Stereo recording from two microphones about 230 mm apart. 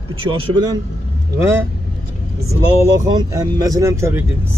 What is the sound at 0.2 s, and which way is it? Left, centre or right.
Speech, right.